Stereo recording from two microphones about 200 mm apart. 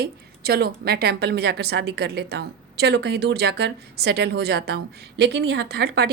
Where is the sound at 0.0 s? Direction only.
50° right (ahead or behind).